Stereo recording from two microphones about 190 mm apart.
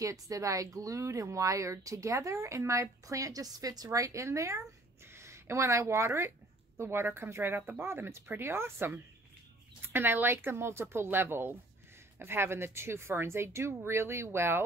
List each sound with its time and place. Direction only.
0.0 s speech: 15° right (ahead or behind)